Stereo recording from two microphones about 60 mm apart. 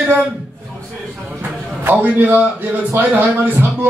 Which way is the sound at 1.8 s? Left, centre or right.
Right.